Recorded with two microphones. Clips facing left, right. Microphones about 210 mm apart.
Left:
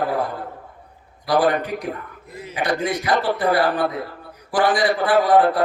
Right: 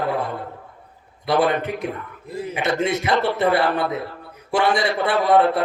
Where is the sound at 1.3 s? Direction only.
25° right (ahead or behind).